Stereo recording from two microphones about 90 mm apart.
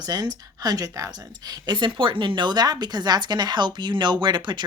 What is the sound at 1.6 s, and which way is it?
Speech, 60° right (ahead or behind).